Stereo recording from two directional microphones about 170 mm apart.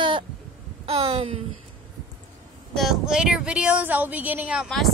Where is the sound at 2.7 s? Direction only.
Centre (ahead or behind).